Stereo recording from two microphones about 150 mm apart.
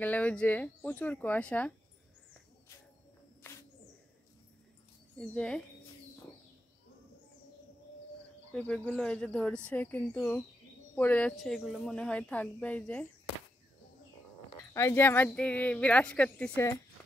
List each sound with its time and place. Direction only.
0.0 s a woman's voice: 10° left (ahead or behind)
3.4 s bird: 15° left (ahead or behind)
5.1 s speech: 5° left (ahead or behind)
8.5 s a woman's voice: 5° left (ahead or behind)
11.3 s a woman's voice: centre (ahead or behind)
14.6 s a woman's voice: 15° left (ahead or behind)